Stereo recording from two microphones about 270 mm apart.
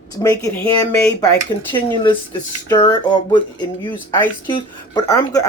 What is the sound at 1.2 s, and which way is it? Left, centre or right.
Speech, centre.